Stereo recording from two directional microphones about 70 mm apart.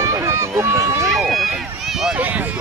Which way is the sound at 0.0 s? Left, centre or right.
Right.